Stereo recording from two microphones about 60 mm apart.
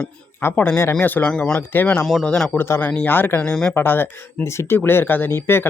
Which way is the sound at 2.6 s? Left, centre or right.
Left.